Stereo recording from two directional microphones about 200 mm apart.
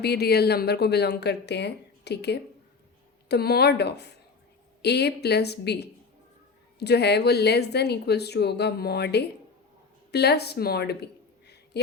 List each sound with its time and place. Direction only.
0.0 s a woman's voice: 55° left (ahead or behind)